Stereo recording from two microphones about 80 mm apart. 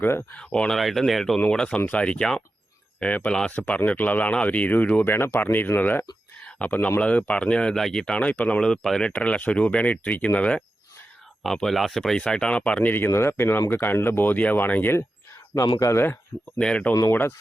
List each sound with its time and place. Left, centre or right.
0.0 s speech: left
0.3 s speech: centre
1.4 s speech: centre
11.4 s speech: centre
13.1 s speech: left
15.8 s a man's voice: left
16.6 s speech: centre
17.1 s speech: left